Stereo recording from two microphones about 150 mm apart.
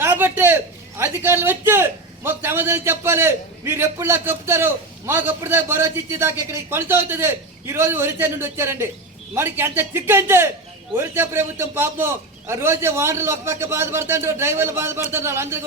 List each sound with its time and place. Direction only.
0.0 s a man's voice: 15° right (ahead or behind)